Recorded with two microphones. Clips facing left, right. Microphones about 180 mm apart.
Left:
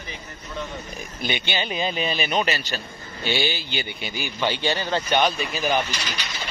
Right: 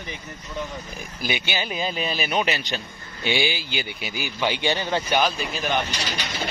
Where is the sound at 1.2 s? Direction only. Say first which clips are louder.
Even; 5° right (ahead or behind).